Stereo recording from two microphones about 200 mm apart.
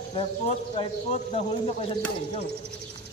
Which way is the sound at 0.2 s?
30° left (ahead or behind).